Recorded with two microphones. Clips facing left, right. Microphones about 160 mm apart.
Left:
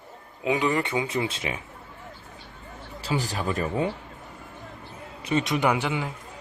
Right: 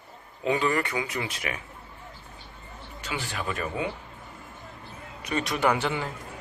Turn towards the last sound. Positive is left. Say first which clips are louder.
# left 1 dB
turn(degrees=10)  # may be behind; listen again after turning